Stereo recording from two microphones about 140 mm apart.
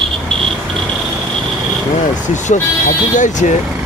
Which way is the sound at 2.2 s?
65° left (ahead or behind).